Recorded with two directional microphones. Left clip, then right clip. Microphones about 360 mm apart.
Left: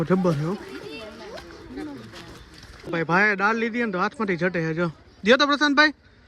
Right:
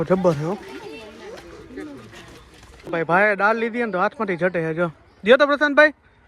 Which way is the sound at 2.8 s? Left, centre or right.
Centre.